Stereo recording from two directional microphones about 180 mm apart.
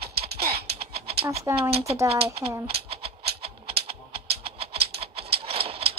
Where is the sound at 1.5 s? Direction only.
15° right (ahead or behind).